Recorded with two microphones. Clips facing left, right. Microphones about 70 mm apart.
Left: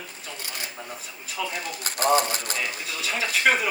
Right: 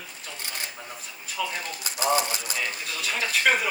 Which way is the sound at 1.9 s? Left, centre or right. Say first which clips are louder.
Left 3 dB; left.